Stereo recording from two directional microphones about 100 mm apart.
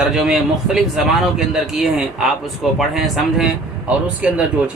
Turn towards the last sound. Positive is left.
turn(degrees=-15)  # may be behind; listen again after turning